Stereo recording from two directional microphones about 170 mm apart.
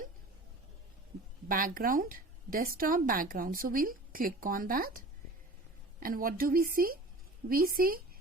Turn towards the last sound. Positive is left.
turn(degrees=-60)  # may be behind; listen again after turning